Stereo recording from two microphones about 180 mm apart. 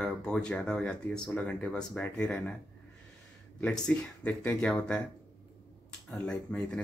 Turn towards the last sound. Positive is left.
turn(degrees=5)  # may be behind; listen again after turning